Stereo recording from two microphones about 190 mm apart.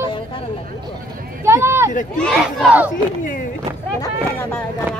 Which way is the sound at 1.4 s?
15° right (ahead or behind).